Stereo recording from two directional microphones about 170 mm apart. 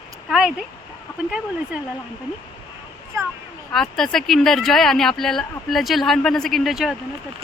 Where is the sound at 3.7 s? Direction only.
5° left (ahead or behind).